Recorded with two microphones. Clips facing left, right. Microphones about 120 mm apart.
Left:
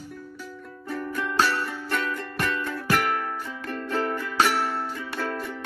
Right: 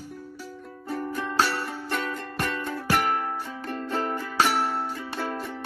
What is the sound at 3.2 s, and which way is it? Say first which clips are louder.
Music: right 1 dB; 25° right (ahead or behind).